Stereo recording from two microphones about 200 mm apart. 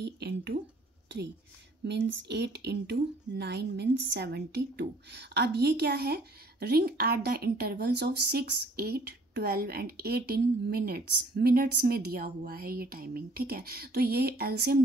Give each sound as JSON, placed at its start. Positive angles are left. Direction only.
{"t": 0.0, "sound": "speech", "side_deg": -55}
{"t": 1.0, "sound": "whispering", "side_deg": -60}
{"t": 1.9, "sound": "a woman's voice", "side_deg": -60}